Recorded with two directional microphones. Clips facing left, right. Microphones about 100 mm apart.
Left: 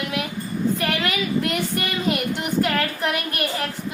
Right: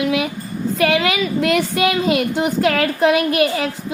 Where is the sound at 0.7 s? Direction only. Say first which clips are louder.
Right 7 dB; 90° right.